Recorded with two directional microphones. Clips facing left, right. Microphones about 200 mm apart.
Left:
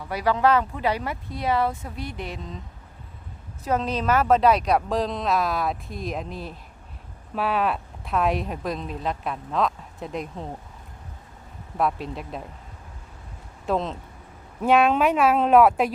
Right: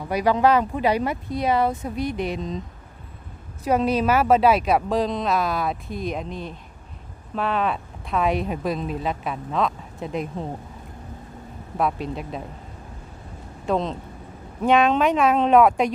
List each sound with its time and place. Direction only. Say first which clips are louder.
0.1 s speech: right 2 dB; 15° right (ahead or behind)
3.6 s a woman's voice: right 5 dB; 10° right (ahead or behind)
11.8 s a woman's voice: right 1 dB; centre (ahead or behind)
13.7 s a woman's voice: right 2 dB; centre (ahead or behind)